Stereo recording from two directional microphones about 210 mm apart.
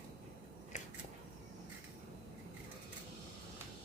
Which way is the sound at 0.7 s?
35° left (ahead or behind).